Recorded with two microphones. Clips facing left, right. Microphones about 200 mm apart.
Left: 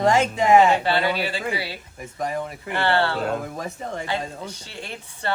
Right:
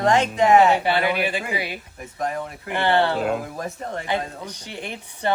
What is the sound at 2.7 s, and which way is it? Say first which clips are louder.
Speech: right 2 dB; 15° right (ahead or behind).